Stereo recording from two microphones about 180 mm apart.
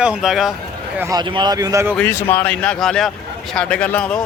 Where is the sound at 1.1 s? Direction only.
25° right (ahead or behind).